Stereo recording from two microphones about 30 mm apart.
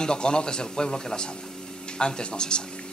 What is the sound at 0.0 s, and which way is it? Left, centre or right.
A man's voice, left.